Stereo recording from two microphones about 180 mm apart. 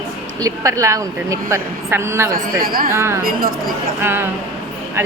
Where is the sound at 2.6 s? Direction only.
55° right (ahead or behind).